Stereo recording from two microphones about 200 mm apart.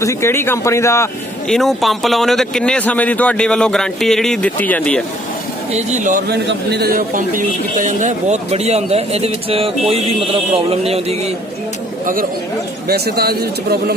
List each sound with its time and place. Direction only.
0.0 s speech: 15° left (ahead or behind)
1.5 s speech: centre (ahead or behind)
5.7 s a man's voice: 35° right (ahead or behind)
12.9 s a man's voice: 50° right (ahead or behind)